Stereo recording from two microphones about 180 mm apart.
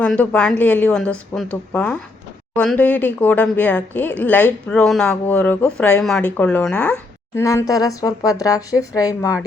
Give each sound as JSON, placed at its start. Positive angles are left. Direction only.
{"t": 0.0, "sound": "speech", "side_deg": 5}
{"t": 1.7, "sound": "speech", "side_deg": 5}